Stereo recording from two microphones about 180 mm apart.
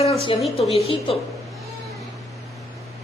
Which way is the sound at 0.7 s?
30° left (ahead or behind).